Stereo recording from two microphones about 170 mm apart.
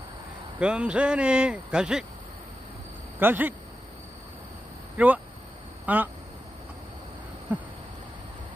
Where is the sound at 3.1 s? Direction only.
10° right (ahead or behind).